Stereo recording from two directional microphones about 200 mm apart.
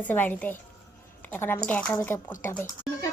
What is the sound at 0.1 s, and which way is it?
A woman's voice, 10° left (ahead or behind).